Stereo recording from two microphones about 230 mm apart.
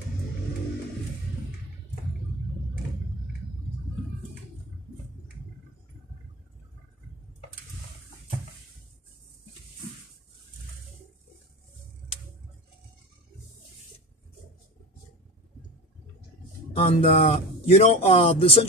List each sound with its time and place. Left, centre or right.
16.7 s speech: left